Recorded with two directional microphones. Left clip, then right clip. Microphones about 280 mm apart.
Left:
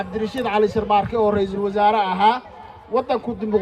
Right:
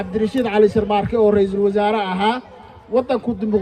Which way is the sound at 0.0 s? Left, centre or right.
Left.